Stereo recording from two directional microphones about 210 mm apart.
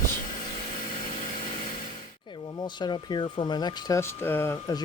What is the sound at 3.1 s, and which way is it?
Speech, 20° left (ahead or behind).